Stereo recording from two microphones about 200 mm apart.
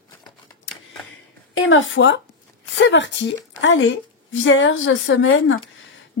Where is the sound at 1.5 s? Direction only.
75° left (ahead or behind).